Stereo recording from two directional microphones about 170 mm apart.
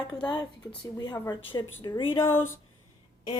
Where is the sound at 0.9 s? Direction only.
20° left (ahead or behind).